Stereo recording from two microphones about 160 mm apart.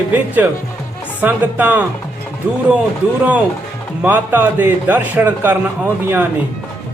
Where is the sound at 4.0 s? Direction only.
10° right (ahead or behind).